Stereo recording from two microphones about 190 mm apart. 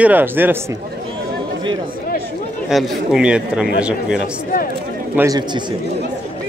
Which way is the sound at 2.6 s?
Centre (ahead or behind).